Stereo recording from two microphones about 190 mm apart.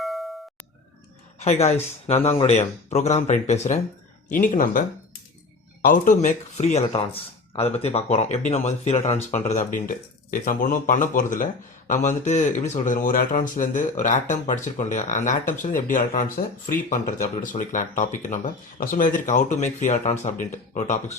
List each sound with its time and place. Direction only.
0.0 s music: centre (ahead or behind)
1.4 s speech: 35° left (ahead or behind)
5.8 s speech: 45° left (ahead or behind)